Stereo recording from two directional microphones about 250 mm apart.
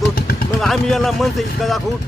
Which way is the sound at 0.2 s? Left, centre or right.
Left.